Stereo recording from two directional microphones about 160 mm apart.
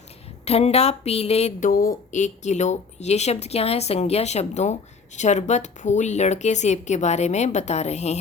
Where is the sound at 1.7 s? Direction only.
65° left (ahead or behind).